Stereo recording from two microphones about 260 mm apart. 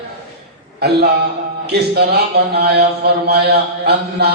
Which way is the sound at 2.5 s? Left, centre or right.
Right.